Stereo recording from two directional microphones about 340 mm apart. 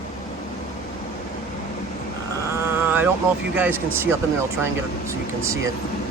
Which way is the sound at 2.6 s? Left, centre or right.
Centre.